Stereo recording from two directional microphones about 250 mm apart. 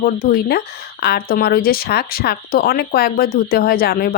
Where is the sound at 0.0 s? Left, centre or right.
Left.